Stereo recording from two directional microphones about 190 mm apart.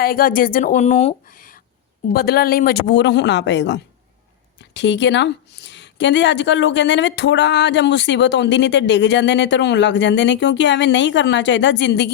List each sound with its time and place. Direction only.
0.0 s speech: 50° left (ahead or behind)
2.1 s a woman's voice: 55° left (ahead or behind)